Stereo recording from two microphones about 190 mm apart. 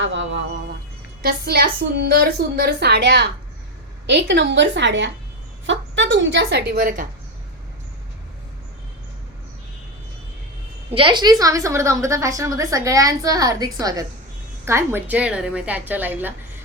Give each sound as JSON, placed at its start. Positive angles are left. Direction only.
{"t": 0.0, "sound": "a sound", "side_deg": -75}
{"t": 1.2, "sound": "a woman's voice", "side_deg": -55}
{"t": 10.9, "sound": "a woman's voice", "side_deg": -25}